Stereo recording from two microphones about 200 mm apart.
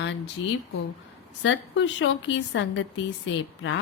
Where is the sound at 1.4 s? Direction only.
70° left (ahead or behind).